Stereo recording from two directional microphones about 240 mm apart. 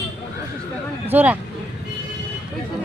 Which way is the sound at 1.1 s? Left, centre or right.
Centre.